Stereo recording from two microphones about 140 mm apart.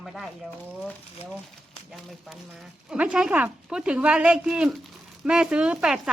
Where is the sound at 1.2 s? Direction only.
45° left (ahead or behind).